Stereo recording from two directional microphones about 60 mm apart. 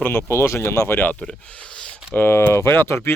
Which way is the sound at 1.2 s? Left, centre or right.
Centre.